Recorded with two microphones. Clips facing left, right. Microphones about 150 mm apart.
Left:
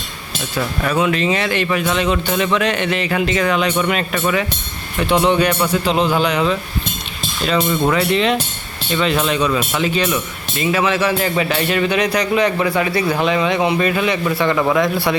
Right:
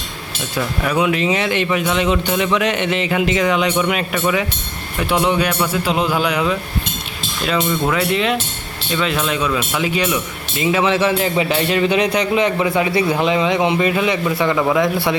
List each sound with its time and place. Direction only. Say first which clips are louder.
0.5 s speech: even; 15° right (ahead or behind)
10.6 s speech: right 1 dB; 20° right (ahead or behind)